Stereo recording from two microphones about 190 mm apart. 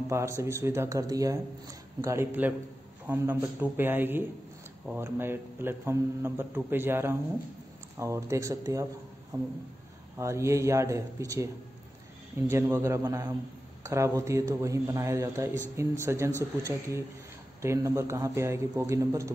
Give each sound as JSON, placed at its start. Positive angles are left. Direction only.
{"t": 0.1, "sound": "a man's voice", "side_deg": -15}
{"t": 10.1, "sound": "a man's voice", "side_deg": -15}